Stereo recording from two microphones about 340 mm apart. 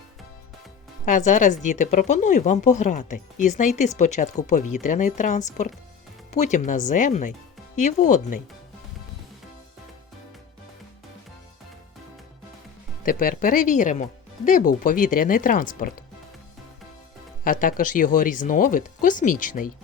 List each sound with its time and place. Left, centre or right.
1.0 s speech: left
13.1 s speech: left
17.4 s speech: left